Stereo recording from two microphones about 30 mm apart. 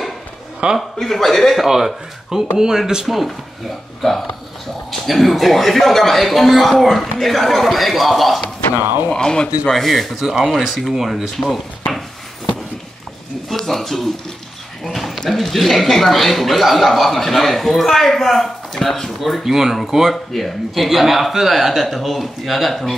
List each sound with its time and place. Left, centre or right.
0.6 s a man's voice: right
1.0 s speech: centre
1.7 s speech: centre
4.0 s speech: centre
5.0 s speech: centre
9.1 s speech: left
9.7 s speech: centre
10.1 s speech: centre
10.5 s speech: centre
13.5 s a sound: centre
15.0 s speech: centre
19.4 s speech: centre